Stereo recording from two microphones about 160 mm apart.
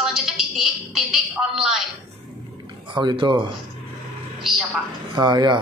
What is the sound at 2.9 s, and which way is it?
Speech, 30° right (ahead or behind).